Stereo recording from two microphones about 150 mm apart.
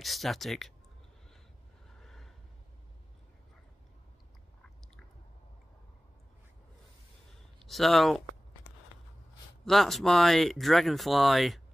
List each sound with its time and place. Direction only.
0.0 s speech: centre (ahead or behind)
2.0 s a sound: centre (ahead or behind)
7.5 s speech: centre (ahead or behind)
9.7 s speech: centre (ahead or behind)